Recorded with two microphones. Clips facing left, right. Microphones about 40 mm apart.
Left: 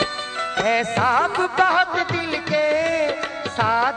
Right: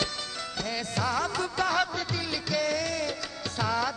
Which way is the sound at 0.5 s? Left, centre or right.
Left.